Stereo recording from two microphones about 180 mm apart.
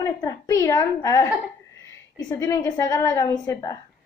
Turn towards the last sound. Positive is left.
turn(degrees=20)  # may be behind; listen again after turning